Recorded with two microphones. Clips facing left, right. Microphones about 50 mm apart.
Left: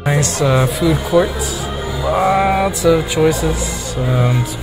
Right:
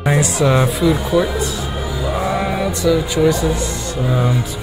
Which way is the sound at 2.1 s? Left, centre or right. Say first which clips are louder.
Left 7 dB; left.